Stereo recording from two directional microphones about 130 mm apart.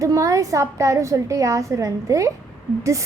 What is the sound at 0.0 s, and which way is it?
A woman's voice, 25° right (ahead or behind).